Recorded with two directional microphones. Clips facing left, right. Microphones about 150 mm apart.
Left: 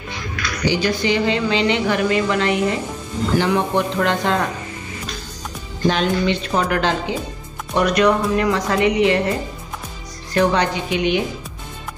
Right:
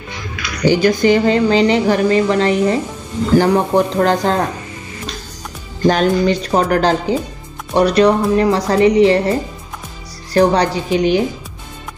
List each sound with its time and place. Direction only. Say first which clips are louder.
0.7 s speech: right 7 dB; 45° right (ahead or behind)
5.9 s speech: right 5 dB; 40° right (ahead or behind)
10.3 s speech: right 5 dB; 35° right (ahead or behind)